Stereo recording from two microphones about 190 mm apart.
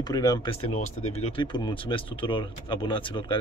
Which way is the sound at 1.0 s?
35° left (ahead or behind).